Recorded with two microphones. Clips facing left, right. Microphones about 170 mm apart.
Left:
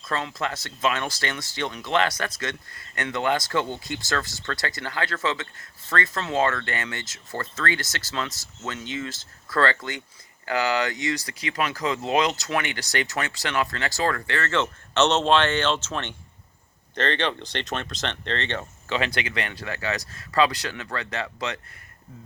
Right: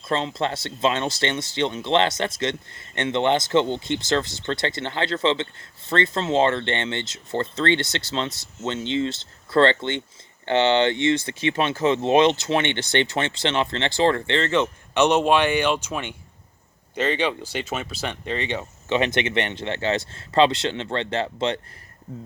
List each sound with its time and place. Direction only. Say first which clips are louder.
0.1 s speech: right 4 dB; 25° right (ahead or behind)
18.9 s speech: right 5 dB; 20° right (ahead or behind)